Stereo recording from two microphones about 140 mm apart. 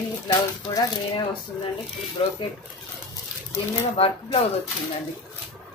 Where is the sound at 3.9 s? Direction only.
45° left (ahead or behind).